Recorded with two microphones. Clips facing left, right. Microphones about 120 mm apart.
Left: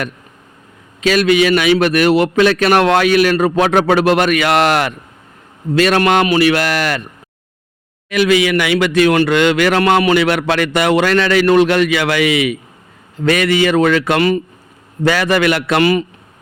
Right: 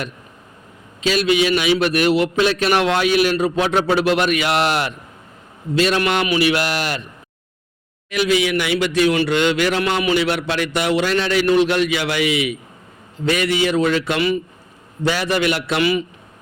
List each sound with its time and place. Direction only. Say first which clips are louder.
1.0 s a man's voice: left 5 dB; 55° left (ahead or behind)
6.0 s speech: left 6 dB; 45° left (ahead or behind)
8.1 s a man's voice: left 5 dB; 70° left (ahead or behind)
8.9 s a man's voice: left 5 dB; 60° left (ahead or behind)
15.0 s a man's voice: left 5 dB; 70° left (ahead or behind); by 16.0 s 50° left (ahead or behind)